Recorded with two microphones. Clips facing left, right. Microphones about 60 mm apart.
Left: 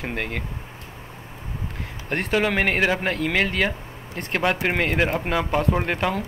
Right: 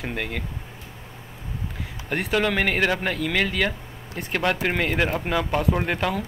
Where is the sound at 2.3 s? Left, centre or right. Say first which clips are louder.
Left 1 dB; centre.